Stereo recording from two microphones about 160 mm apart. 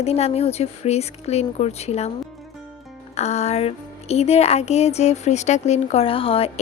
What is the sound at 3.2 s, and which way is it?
Speech, 45° left (ahead or behind).